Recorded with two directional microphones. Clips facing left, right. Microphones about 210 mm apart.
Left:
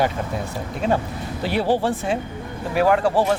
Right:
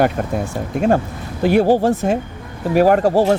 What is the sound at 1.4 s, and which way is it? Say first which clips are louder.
Speech: right 7 dB; 45° right (ahead or behind).